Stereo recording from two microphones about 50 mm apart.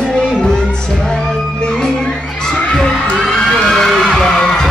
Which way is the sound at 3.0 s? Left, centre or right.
Centre.